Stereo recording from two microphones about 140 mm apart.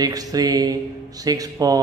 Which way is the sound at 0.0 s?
25° right (ahead or behind).